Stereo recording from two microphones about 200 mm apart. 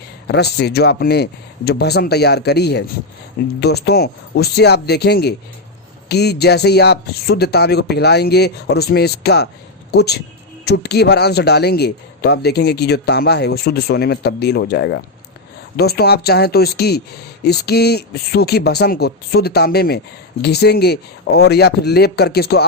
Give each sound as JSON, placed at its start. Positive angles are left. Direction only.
{"t": 0.3, "sound": "a man's voice", "side_deg": 55}